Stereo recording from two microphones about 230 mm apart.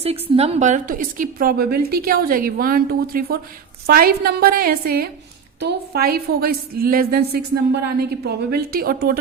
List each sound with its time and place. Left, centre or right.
0.0 s a woman's voice: right